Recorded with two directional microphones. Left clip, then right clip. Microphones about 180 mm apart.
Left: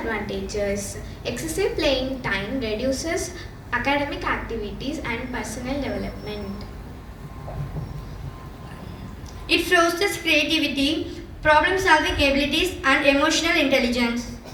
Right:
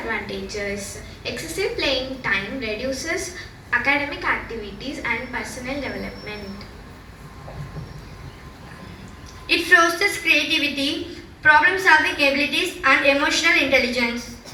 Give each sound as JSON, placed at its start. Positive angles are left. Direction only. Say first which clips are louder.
{"t": 0.1, "sound": "a woman's voice", "louder": "even", "side_deg": 20}
{"t": 9.5, "sound": "a woman's voice", "louder": "right 3 dB", "side_deg": 15}